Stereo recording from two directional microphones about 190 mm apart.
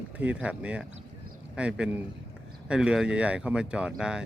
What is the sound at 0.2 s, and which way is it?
Speech, 5° right (ahead or behind).